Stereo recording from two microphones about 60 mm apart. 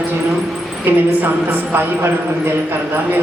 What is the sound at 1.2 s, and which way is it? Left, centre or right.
Speech, right.